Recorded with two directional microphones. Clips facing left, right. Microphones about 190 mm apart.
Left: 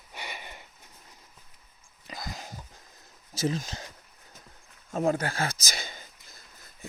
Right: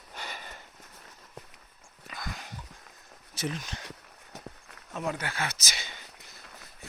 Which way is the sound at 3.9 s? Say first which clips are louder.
Right 7 dB; 70° right (ahead or behind).